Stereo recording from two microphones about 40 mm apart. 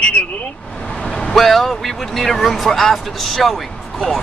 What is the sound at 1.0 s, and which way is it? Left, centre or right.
Vehicle, left.